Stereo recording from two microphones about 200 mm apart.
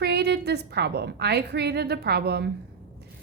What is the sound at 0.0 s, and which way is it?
A woman's voice, 55° right (ahead or behind).